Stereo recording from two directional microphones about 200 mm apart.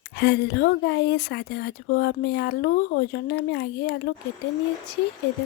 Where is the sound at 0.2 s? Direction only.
55° left (ahead or behind).